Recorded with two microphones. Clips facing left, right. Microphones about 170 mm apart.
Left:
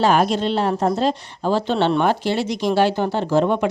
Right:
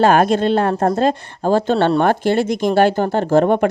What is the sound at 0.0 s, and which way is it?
Speech, 55° right (ahead or behind).